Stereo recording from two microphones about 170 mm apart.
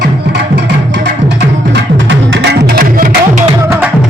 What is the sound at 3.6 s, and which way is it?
Music, 15° right (ahead or behind).